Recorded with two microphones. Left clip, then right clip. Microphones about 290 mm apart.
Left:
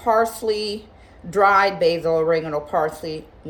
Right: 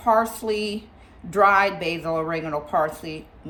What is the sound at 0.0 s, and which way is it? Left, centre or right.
A woman's voice, centre.